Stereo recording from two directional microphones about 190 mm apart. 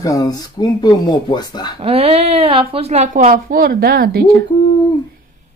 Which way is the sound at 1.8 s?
30° right (ahead or behind).